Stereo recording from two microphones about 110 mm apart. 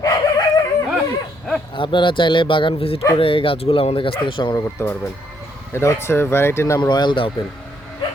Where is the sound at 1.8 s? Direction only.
50° left (ahead or behind).